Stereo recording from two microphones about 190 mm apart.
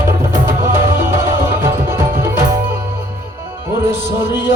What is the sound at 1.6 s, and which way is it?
Music, 15° right (ahead or behind).